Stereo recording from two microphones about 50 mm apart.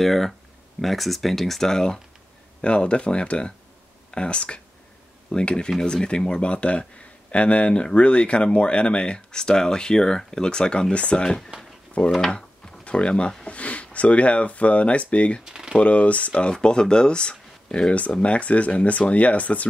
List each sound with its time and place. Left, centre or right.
0.0 s speech: centre; by 11.2 s left
11.2 s speech: centre
12.0 s speech: left
12.3 s a sound: left
13.5 s speech: left
15.4 s speech: centre
15.8 s speech: left